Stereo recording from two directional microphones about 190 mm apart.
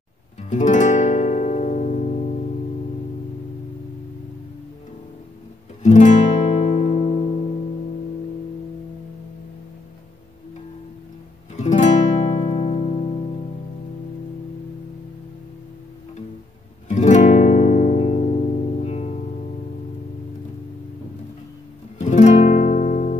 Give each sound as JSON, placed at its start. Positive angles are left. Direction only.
{"t": 0.4, "sound": "music", "side_deg": 40}
{"t": 5.8, "sound": "guitar", "side_deg": 40}
{"t": 11.5, "sound": "music", "side_deg": 40}
{"t": 16.9, "sound": "music", "side_deg": 40}
{"t": 21.9, "sound": "guitar", "side_deg": 40}